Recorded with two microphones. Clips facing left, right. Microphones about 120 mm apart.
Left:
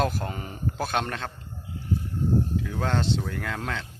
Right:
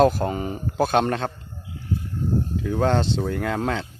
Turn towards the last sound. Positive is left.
turn(degrees=-35)  # may be behind; listen again after turning